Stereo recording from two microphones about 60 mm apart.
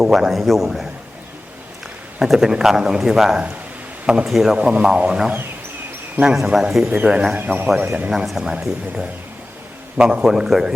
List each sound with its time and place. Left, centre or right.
0.0 s a man's voice: centre
2.2 s a man's voice: centre
4.5 s speech: centre
7.3 s speech: right
8.1 s speech: centre
10.0 s speech: centre
10.2 s speech: centre